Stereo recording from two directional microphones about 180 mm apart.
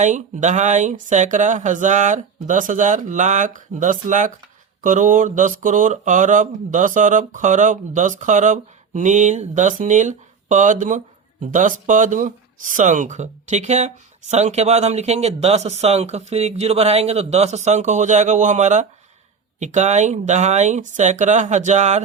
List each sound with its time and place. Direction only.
0.0 s speech: 40° right (ahead or behind)